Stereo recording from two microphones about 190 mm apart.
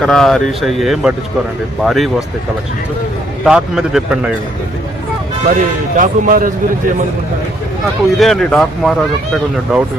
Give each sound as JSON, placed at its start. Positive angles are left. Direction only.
{"t": 0.0, "sound": "speech", "side_deg": 5}
{"t": 3.4, "sound": "speech", "side_deg": -5}
{"t": 5.5, "sound": "speech", "side_deg": -45}
{"t": 8.2, "sound": "speech", "side_deg": 0}